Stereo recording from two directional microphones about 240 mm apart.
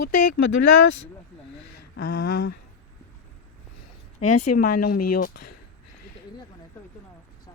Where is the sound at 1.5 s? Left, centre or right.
Left.